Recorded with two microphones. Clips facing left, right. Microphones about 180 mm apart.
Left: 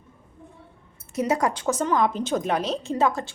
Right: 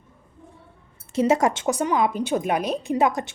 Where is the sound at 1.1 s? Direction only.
25° right (ahead or behind).